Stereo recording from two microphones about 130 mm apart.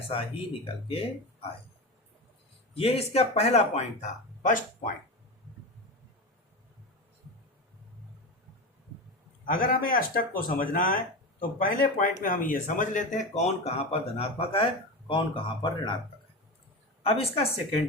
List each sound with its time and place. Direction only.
0.1 s a man's voice: 45° left (ahead or behind)
2.7 s a man's voice: 50° left (ahead or behind)
4.4 s speech: 90° left
9.5 s speech: 90° left; by 16.0 s 40° left (ahead or behind)
17.0 s a man's voice: 50° left (ahead or behind)